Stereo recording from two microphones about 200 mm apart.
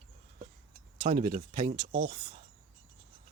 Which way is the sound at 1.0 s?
40° right (ahead or behind).